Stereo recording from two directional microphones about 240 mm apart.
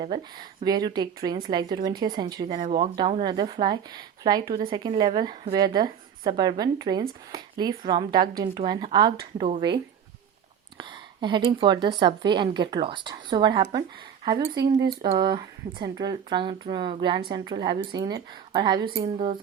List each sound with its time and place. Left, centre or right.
0.0 s a woman's voice: centre